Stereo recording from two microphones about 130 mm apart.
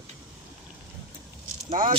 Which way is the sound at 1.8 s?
90° right.